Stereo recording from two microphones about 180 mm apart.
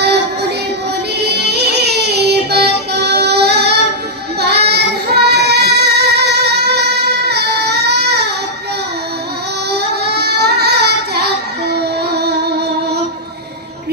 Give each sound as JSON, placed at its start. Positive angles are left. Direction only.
{"t": 0.0, "sound": "music", "side_deg": -65}
{"t": 4.4, "sound": "child singing", "side_deg": -65}
{"t": 9.7, "sound": "child singing", "side_deg": -65}
{"t": 11.7, "sound": "music", "side_deg": -65}